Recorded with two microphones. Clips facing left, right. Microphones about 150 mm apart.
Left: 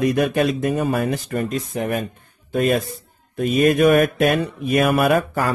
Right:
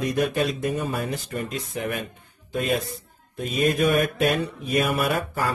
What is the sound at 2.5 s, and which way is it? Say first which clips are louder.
Speech: left 6 dB; 55° left (ahead or behind).